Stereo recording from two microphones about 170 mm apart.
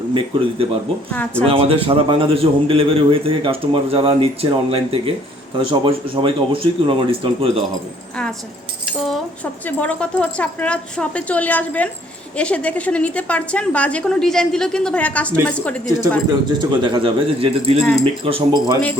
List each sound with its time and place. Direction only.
0.1 s a man's voice: 30° right (ahead or behind)
1.1 s a woman's voice: 10° left (ahead or behind)
1.5 s a man's voice: 35° right (ahead or behind)
9.4 s a woman's voice: 10° left (ahead or behind)
16.3 s a man's voice: 25° right (ahead or behind)